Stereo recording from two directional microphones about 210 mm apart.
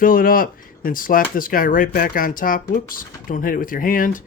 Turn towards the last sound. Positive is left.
turn(degrees=40)  # may be behind; listen again after turning